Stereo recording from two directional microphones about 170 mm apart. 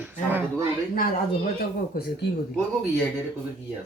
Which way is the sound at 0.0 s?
10° right (ahead or behind).